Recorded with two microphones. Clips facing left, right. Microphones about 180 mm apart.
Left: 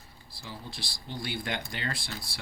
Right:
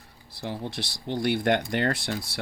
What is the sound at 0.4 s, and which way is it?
Speech, 65° right (ahead or behind).